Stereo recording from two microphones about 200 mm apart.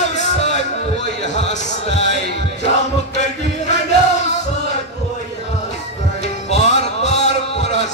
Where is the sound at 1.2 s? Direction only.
35° left (ahead or behind).